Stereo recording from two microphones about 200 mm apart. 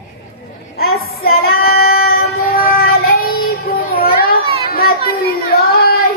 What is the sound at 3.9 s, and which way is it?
Children playing, 45° left (ahead or behind).